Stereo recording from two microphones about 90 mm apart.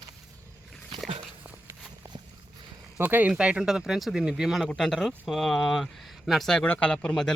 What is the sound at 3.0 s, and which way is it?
Speech, 20° right (ahead or behind).